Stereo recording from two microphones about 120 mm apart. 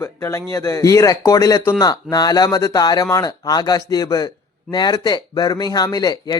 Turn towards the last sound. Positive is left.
turn(degrees=30)  # may be behind; listen again after turning